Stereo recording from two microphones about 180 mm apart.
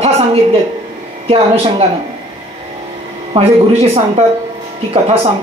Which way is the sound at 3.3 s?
30° right (ahead or behind).